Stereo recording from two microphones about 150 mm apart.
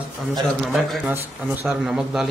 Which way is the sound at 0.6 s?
Centre (ahead or behind).